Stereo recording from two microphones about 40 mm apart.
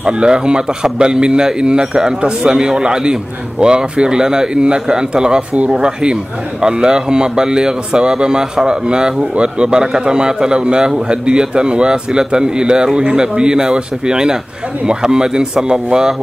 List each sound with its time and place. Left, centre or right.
0.0 s speech: right